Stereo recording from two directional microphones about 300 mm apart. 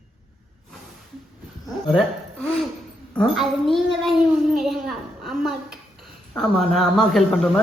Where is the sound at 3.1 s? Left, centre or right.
Centre.